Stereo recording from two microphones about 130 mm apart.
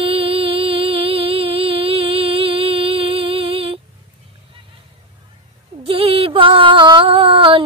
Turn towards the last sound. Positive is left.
turn(degrees=-45)  # may be behind; listen again after turning